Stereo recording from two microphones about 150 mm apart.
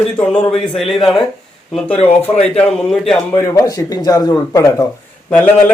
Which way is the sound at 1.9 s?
40° left (ahead or behind).